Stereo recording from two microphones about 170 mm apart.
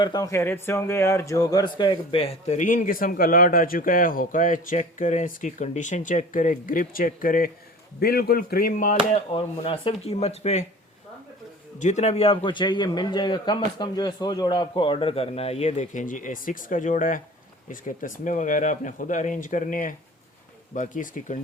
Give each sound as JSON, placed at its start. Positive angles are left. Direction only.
{"t": 0.0, "sound": "speech", "side_deg": 25}
{"t": 9.1, "sound": "speech", "side_deg": 35}
{"t": 11.8, "sound": "speech", "side_deg": 45}